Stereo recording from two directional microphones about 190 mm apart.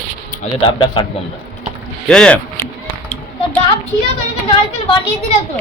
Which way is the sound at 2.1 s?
5° left (ahead or behind).